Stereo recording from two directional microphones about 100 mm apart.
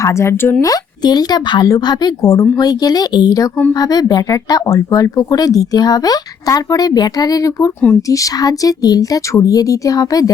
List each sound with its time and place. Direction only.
0.0 s speech: 30° left (ahead or behind)
0.6 s a woman's voice: 40° left (ahead or behind)